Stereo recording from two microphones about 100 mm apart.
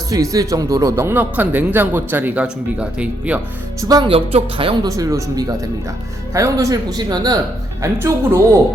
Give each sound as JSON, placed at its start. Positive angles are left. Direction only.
{"t": 0.1, "sound": "speech", "side_deg": -35}
{"t": 3.8, "sound": "speech", "side_deg": -40}
{"t": 4.0, "sound": "speech", "side_deg": -75}
{"t": 4.8, "sound": "speech", "side_deg": -35}
{"t": 7.9, "sound": "speech", "side_deg": -25}